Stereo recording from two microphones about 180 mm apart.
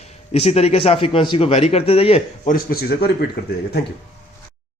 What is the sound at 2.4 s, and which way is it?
Speech, 55° left (ahead or behind).